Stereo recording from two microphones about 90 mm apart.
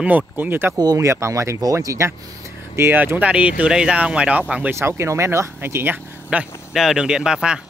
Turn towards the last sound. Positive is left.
turn(degrees=-10)  # may be behind; listen again after turning